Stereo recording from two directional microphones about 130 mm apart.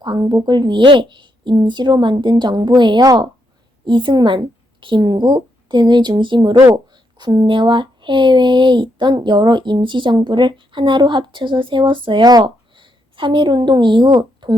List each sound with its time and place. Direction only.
0.0 s speech: 35° right (ahead or behind)